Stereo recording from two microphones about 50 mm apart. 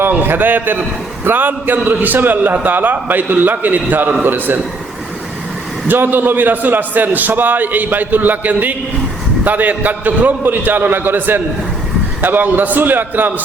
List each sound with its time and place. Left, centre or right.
0.1 s a man's voice: right
5.9 s a man's voice: right